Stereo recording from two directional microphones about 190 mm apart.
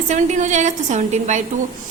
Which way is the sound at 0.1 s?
40° right (ahead or behind).